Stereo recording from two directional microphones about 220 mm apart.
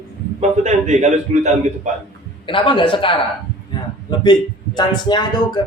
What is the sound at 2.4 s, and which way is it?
A man's voice, 25° left (ahead or behind).